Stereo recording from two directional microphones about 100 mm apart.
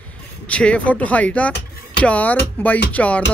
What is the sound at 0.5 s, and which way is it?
Speech, 10° left (ahead or behind).